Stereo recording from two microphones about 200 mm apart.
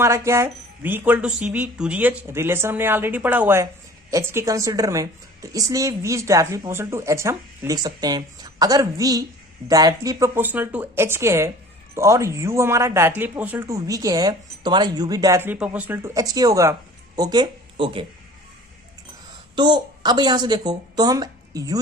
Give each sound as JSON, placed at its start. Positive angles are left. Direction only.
{"t": 0.0, "sound": "a woman's voice", "side_deg": -15}
{"t": 19.5, "sound": "a woman's voice", "side_deg": -20}